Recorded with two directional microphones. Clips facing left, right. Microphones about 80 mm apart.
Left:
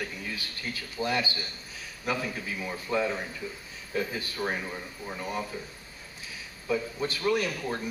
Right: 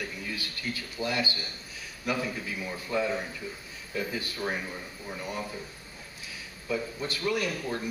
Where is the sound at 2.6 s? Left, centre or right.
Left.